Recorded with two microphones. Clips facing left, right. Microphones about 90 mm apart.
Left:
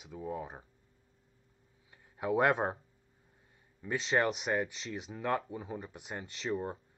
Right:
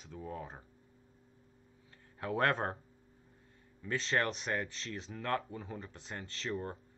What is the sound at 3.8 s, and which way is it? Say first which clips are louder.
Speech: left 3 dB; 5° left (ahead or behind).